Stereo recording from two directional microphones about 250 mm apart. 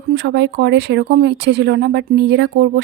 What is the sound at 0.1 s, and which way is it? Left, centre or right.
Speech, right.